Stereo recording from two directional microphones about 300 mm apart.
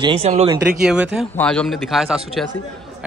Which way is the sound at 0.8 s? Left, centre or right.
Centre.